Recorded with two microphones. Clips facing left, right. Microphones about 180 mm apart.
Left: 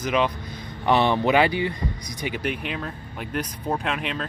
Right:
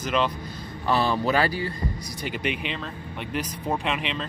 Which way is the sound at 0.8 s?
20° left (ahead or behind).